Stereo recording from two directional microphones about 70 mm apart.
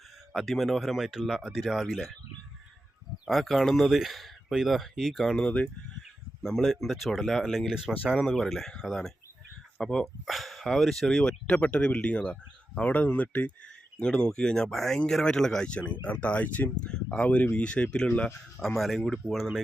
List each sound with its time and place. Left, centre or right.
0.3 s speech: centre
3.2 s speech: centre; by 13.5 s left
14.0 s speech: centre
18.6 s speech: centre